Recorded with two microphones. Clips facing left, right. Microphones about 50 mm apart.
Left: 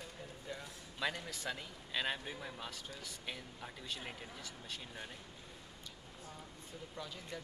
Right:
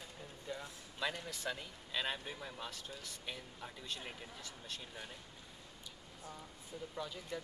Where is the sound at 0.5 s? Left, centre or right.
Centre.